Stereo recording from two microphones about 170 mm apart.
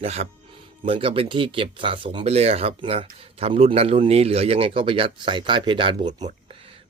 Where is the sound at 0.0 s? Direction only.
35° right (ahead or behind).